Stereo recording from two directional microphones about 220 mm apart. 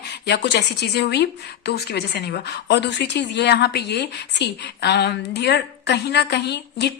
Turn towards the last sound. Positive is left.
turn(degrees=50)  # may be behind; listen again after turning